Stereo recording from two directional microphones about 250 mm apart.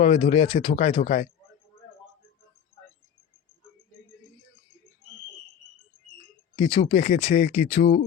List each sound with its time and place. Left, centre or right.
0.0 s speech: left
6.6 s speech: left